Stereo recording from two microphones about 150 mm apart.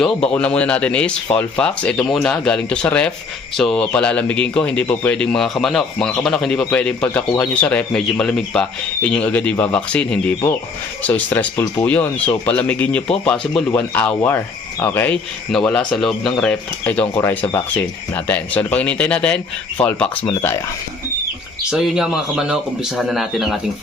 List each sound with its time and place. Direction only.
0.0 s speech: 5° left (ahead or behind)
11.5 s speech: 20° left (ahead or behind)
11.9 s speech: 10° left (ahead or behind)
21.7 s speech: 5° right (ahead or behind)